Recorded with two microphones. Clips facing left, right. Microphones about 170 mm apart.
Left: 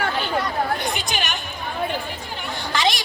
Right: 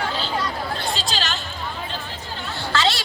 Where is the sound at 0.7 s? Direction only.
20° left (ahead or behind).